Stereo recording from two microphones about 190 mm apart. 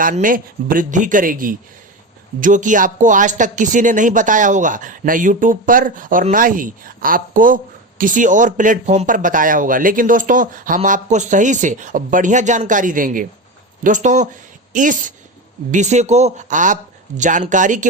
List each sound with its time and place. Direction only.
0.0 s a woman's voice: 45° right (ahead or behind)